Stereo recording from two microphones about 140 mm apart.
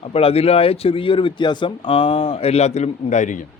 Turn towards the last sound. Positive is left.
turn(degrees=65)  # may be behind; listen again after turning